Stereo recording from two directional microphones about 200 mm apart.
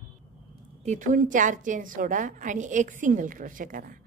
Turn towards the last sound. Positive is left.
turn(degrees=-45)  # may be behind; listen again after turning